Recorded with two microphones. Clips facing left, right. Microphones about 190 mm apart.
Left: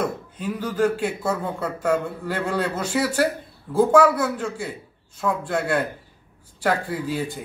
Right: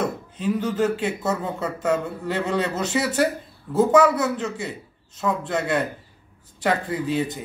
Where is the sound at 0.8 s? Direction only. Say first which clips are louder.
Left 1 dB; 10° left (ahead or behind).